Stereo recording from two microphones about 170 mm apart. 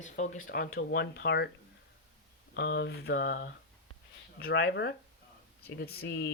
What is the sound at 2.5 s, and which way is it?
Speech, 90° left.